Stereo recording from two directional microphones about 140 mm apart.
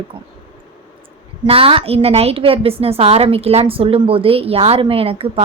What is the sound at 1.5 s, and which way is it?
A woman's voice, 40° right (ahead or behind).